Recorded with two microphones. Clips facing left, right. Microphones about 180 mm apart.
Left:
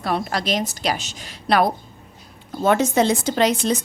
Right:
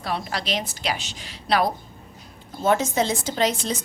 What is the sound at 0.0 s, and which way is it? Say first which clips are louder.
A woman's voice: left 5 dB; 50° left (ahead or behind).